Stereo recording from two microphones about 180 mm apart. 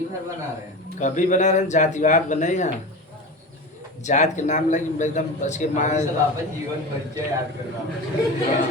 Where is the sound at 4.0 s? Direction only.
40° left (ahead or behind).